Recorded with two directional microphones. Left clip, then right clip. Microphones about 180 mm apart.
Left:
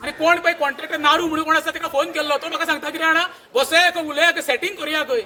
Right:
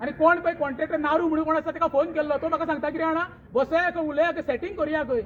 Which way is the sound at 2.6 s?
55° left (ahead or behind).